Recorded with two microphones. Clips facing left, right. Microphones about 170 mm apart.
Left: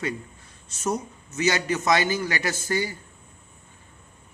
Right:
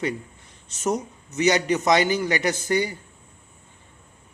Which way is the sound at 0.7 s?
15° right (ahead or behind).